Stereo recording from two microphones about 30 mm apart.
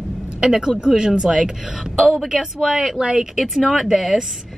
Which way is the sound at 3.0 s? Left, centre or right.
Right.